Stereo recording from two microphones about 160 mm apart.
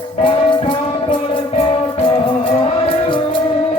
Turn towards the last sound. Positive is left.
turn(degrees=35)  # may be behind; listen again after turning